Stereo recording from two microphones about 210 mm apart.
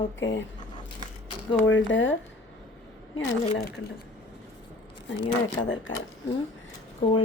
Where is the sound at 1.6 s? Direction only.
65° left (ahead or behind).